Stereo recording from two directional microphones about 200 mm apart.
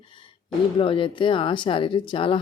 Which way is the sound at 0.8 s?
25° left (ahead or behind).